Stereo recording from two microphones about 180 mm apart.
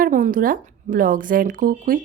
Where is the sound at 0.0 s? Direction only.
50° right (ahead or behind).